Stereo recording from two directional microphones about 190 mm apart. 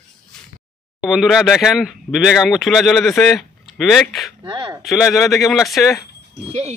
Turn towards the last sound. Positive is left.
turn(degrees=-35)  # may be behind; listen again after turning